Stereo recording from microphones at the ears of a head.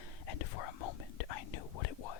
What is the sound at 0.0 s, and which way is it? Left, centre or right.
Whispering, left.